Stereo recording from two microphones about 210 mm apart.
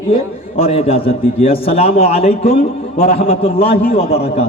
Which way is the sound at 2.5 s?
40° left (ahead or behind).